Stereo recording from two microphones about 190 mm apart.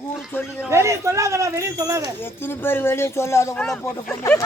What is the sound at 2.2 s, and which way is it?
Speech, 10° left (ahead or behind).